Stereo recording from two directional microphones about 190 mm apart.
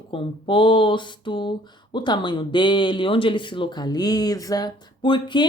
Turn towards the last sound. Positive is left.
turn(degrees=25)  # may be behind; listen again after turning